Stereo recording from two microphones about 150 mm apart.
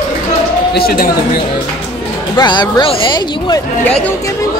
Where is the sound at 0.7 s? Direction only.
85° left.